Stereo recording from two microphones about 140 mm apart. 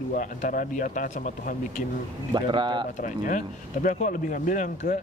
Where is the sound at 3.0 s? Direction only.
65° left (ahead or behind).